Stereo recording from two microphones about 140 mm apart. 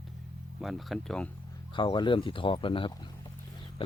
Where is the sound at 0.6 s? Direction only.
Centre (ahead or behind).